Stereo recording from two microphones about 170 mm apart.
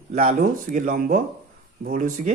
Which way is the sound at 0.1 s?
50° right (ahead or behind).